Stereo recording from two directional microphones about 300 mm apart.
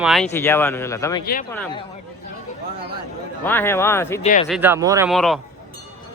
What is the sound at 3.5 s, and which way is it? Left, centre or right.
Speech, centre.